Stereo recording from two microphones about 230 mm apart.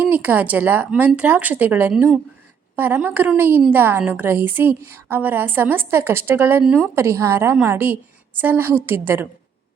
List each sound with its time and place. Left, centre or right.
0.0 s a woman's voice: centre